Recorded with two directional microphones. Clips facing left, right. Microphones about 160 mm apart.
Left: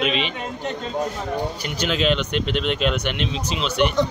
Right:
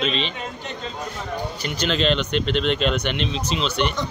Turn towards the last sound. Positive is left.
turn(degrees=10)  # may be behind; listen again after turning